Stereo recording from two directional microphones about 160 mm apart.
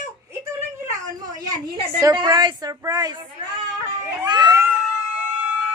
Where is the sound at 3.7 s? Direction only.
25° right (ahead or behind).